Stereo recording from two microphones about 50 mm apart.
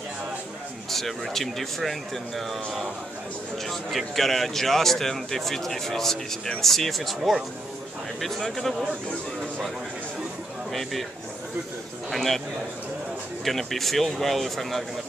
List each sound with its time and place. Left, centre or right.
0.8 s speech: centre
7.2 s speech: centre
8.2 s speech: centre
10.7 s speech: centre
12.1 s speech: centre
13.4 s speech: centre